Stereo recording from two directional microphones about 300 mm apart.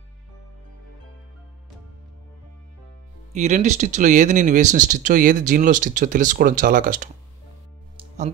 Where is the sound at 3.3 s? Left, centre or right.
Right.